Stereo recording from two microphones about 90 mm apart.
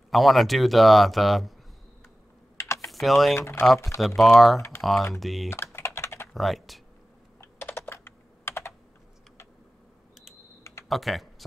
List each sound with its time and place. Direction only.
0.1 s a man's voice: centre (ahead or behind)
2.5 s typing: 30° left (ahead or behind)
2.9 s speech: centre (ahead or behind)
3.3 s speech: 30° left (ahead or behind)
4.0 s a man's voice: centre (ahead or behind)
4.6 s speech: 30° left (ahead or behind)
5.2 s a man's voice: centre (ahead or behind)
5.5 s typing: 30° left (ahead or behind)
6.3 s speech: centre (ahead or behind)
7.7 s computer keyboard: 25° left (ahead or behind)
10.6 s computer keyboard: 30° left (ahead or behind)
10.9 s speech: centre (ahead or behind)